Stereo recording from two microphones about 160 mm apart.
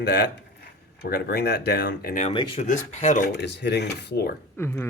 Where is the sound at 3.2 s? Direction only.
90° left.